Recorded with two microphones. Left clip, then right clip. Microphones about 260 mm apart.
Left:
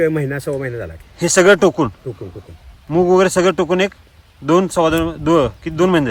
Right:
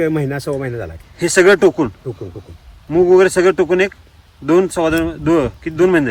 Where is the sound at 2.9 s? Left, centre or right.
Centre.